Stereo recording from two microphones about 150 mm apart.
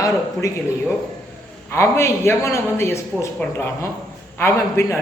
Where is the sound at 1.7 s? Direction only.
20° left (ahead or behind).